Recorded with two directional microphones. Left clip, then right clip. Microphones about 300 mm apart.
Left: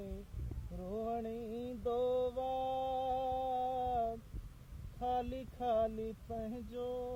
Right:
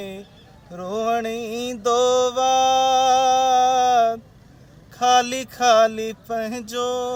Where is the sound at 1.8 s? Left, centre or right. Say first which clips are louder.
Right 17 dB; right.